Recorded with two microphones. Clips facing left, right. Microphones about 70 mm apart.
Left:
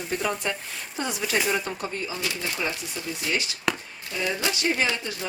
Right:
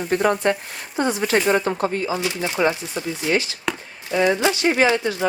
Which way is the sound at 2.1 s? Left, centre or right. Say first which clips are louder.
Right 7 dB; right.